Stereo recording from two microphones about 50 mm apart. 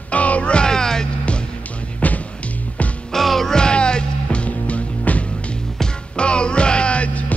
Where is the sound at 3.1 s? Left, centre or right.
Centre.